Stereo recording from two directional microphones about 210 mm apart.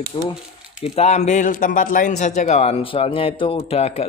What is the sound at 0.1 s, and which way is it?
Speech, 20° left (ahead or behind).